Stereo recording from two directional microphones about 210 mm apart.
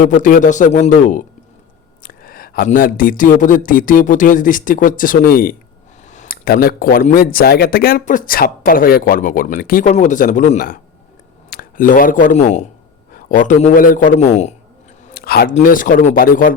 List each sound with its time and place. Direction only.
0.0 s speech: 40° left (ahead or behind)
15.0 s a sound: 45° left (ahead or behind)
15.5 s speech: 40° left (ahead or behind)